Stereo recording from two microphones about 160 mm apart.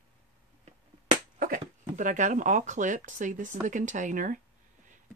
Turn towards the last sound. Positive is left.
turn(degrees=-55)  # may be behind; listen again after turning